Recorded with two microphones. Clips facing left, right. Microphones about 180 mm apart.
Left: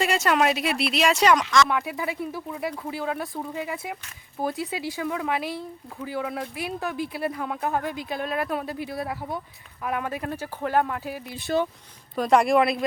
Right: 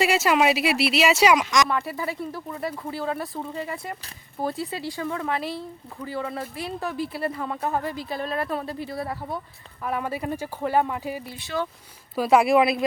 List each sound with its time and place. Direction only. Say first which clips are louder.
0.0 s speech: right 2 dB; 5° right (ahead or behind)
1.6 s speech: even; centre (ahead or behind)
11.5 s speech: left 4 dB; 30° left (ahead or behind)
12.1 s speech: right 1 dB; 5° right (ahead or behind)